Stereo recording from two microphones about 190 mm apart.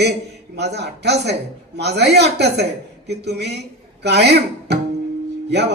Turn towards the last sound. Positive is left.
turn(degrees=-65)  # may be behind; listen again after turning